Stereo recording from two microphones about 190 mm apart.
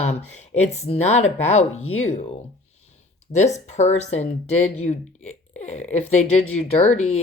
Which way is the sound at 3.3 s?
35° left (ahead or behind).